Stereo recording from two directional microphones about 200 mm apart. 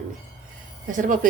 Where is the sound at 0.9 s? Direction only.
40° right (ahead or behind).